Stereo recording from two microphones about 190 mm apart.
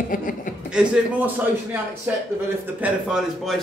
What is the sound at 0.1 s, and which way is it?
Speech, 45° left (ahead or behind).